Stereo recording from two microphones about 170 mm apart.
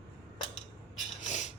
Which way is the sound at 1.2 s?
45° left (ahead or behind).